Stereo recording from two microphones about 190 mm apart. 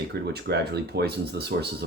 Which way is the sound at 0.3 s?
60° right (ahead or behind).